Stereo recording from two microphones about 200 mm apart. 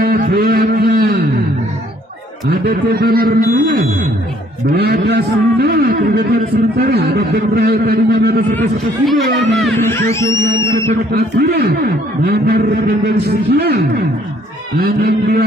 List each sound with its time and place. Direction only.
0.0 s a sound: 50° right (ahead or behind)
2.5 s a man's voice: 50° right (ahead or behind)
8.5 s speech: centre (ahead or behind)
9.8 s music: 15° left (ahead or behind)
11.1 s a man's voice: 60° right (ahead or behind)